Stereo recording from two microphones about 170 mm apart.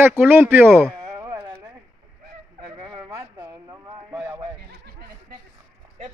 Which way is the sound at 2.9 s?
25° right (ahead or behind).